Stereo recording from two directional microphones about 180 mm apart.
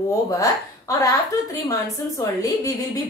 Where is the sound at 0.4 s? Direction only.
20° left (ahead or behind).